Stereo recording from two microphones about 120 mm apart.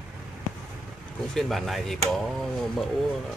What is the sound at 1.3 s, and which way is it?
Speech, centre (ahead or behind).